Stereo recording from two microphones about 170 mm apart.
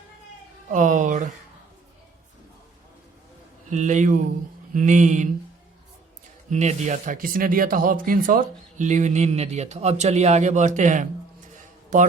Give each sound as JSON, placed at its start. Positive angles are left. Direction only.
{"t": 0.7, "sound": "speech", "side_deg": -50}
{"t": 3.7, "sound": "speech", "side_deg": -45}
{"t": 6.5, "sound": "speech", "side_deg": -45}